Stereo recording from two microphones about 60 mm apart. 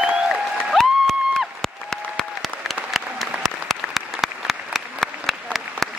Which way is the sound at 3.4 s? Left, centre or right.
Centre.